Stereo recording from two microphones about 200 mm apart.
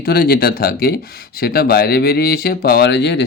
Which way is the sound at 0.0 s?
50° left (ahead or behind).